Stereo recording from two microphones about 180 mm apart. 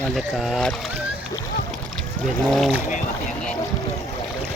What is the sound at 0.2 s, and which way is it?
Speech, centre (ahead or behind).